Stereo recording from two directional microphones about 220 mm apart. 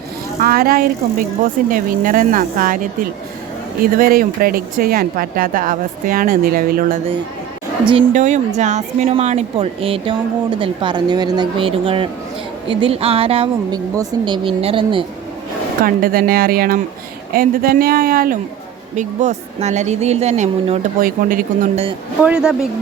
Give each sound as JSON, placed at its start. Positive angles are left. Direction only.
{"t": 0.3, "sound": "speech", "side_deg": -40}
{"t": 8.1, "sound": "speech", "side_deg": -35}
{"t": 15.8, "sound": "speech", "side_deg": -40}
{"t": 22.2, "sound": "speech", "side_deg": -5}